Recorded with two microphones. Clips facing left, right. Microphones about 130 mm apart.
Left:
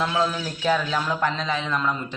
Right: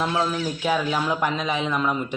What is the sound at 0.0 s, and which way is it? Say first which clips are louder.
A man's voice: even; 10° right (ahead or behind).